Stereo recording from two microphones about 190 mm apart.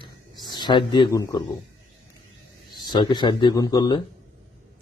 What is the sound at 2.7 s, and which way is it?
A man's voice, 20° left (ahead or behind).